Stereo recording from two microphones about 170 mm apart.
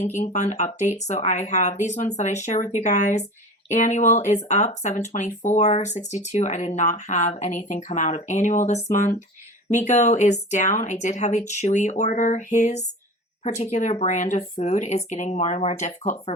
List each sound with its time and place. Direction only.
0.0 s speech: 40° left (ahead or behind)